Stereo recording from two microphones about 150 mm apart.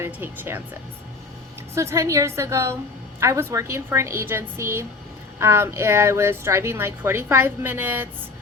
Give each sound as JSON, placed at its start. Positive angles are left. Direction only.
{"t": 0.0, "sound": "speech", "side_deg": -15}
{"t": 1.7, "sound": "a woman's voice", "side_deg": -20}